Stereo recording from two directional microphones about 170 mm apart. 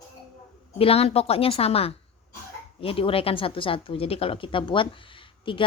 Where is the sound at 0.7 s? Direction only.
35° left (ahead or behind).